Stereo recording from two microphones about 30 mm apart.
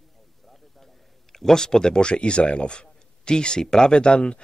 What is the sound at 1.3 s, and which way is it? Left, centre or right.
Speech, centre.